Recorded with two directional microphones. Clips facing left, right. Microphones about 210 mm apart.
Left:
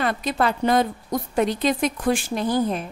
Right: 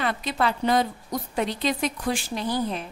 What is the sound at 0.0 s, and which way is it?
Speech, 45° left (ahead or behind).